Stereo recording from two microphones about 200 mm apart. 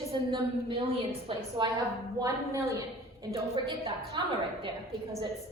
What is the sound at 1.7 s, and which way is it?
A woman's voice, 15° right (ahead or behind).